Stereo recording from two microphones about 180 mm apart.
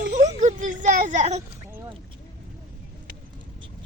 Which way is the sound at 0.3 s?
45° right (ahead or behind).